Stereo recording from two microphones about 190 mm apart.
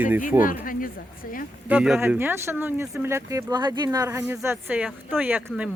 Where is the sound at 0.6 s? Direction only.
45° left (ahead or behind).